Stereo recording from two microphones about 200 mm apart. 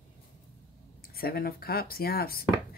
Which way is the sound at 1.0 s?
50° left (ahead or behind).